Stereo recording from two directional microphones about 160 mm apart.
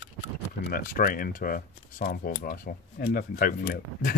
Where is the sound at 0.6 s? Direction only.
65° left (ahead or behind).